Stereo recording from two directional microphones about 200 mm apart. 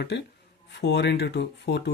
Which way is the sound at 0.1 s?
60° left (ahead or behind).